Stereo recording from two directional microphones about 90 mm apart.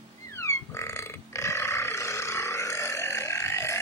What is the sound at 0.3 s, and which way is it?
Burping, 30° left (ahead or behind).